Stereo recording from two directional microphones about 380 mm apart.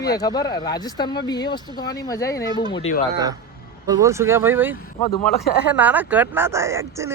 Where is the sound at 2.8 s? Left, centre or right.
Left.